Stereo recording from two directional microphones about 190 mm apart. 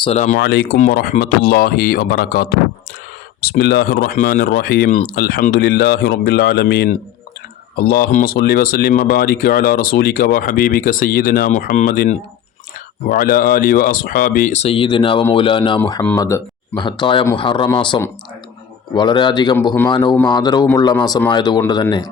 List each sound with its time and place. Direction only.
0.0 s speech: 35° left (ahead or behind)
0.3 s speech: 60° left (ahead or behind); by 22.1 s 20° left (ahead or behind)